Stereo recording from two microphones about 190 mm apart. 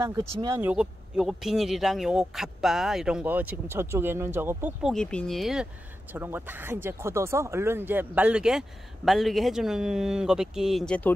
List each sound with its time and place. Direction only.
0.0 s speech: 15° right (ahead or behind)
4.9 s speech: 5° left (ahead or behind)